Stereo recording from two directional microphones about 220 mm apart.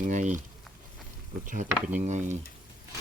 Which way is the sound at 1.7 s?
5° right (ahead or behind).